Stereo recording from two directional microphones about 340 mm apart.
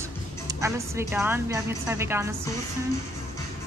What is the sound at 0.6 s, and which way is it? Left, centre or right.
A woman's voice, centre.